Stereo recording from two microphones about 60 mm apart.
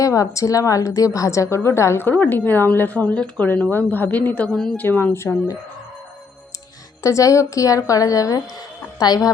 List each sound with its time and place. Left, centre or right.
0.0 s a woman's voice: left
2.0 s a woman's voice: left
4.5 s a woman's voice: centre
4.8 s a woman's voice: left
7.0 s a woman's voice: left
9.0 s a woman's voice: left